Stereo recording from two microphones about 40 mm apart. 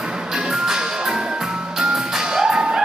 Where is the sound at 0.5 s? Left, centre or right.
Centre.